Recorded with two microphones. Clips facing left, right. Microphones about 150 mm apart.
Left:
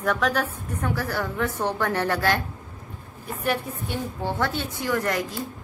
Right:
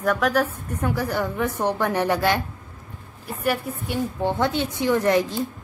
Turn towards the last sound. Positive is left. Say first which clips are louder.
# right 6 dB
turn(degrees=-25)  # may be behind; listen again after turning